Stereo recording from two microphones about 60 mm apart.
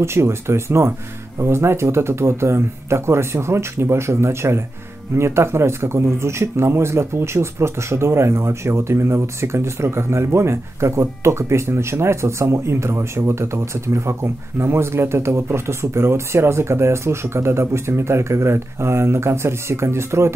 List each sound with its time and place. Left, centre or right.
0.0 s speech: right